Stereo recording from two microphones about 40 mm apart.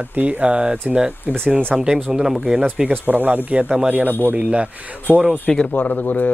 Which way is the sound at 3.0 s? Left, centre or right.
Right.